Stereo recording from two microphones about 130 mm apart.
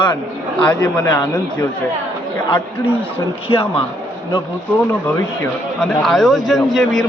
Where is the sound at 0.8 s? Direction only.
30° left (ahead or behind).